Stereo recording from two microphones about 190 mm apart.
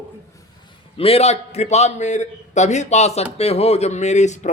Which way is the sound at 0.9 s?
30° left (ahead or behind).